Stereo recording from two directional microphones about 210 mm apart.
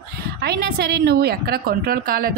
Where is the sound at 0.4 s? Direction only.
50° right (ahead or behind).